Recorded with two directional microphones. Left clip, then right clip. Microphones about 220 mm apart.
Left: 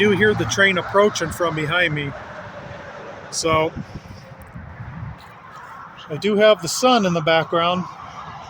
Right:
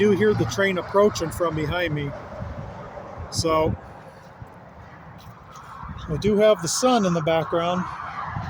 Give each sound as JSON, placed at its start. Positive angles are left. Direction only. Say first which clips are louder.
{"t": 0.0, "sound": "speech", "louder": "left 3 dB", "side_deg": -5}
{"t": 3.4, "sound": "speech", "louder": "left 2 dB", "side_deg": -5}
{"t": 6.2, "sound": "speech", "louder": "left 3 dB", "side_deg": 5}
{"t": 7.8, "sound": "fowl", "louder": "right 2 dB", "side_deg": 50}